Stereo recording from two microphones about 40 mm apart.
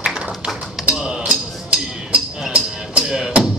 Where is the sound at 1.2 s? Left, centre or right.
Right.